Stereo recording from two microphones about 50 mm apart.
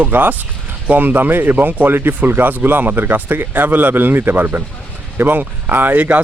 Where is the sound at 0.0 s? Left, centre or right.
Right.